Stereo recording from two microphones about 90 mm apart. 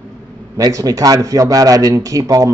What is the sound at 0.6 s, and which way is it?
Speech, 40° right (ahead or behind).